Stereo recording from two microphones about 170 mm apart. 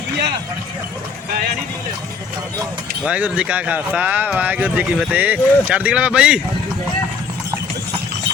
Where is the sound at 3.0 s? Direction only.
5° right (ahead or behind).